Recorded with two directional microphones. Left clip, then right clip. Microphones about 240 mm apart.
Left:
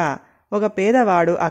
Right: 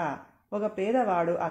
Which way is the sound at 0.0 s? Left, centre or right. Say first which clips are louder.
Left 10 dB; left.